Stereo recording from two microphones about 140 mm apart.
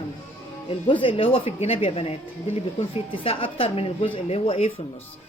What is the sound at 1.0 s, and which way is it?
Speech, 40° left (ahead or behind).